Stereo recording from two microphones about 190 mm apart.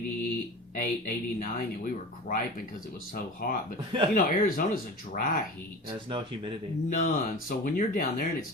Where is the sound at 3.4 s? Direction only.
45° left (ahead or behind).